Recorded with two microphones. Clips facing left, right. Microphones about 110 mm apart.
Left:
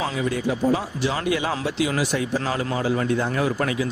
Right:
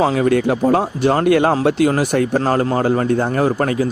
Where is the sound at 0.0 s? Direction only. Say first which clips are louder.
Right 10 dB; 55° right (ahead or behind).